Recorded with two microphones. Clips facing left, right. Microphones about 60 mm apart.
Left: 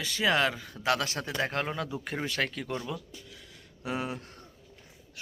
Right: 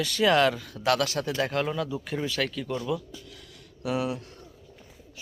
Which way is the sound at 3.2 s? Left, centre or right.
Left.